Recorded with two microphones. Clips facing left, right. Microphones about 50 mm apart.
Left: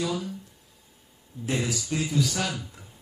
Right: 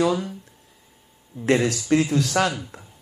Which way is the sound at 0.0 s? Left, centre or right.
Right.